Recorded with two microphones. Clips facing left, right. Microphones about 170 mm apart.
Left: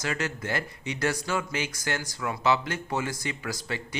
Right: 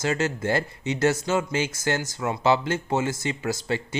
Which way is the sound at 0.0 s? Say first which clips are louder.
Right 6 dB; 25° right (ahead or behind).